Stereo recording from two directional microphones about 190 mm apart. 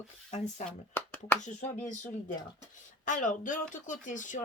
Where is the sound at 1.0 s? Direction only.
10° left (ahead or behind).